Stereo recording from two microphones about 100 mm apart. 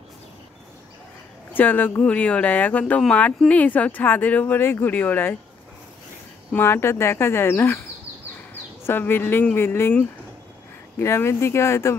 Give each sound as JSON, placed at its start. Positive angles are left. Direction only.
{"t": 1.5, "sound": "speech", "side_deg": 20}
{"t": 6.5, "sound": "speech", "side_deg": 25}
{"t": 8.8, "sound": "speech", "side_deg": 20}